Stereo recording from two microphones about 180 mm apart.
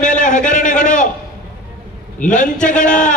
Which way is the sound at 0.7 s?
5° left (ahead or behind).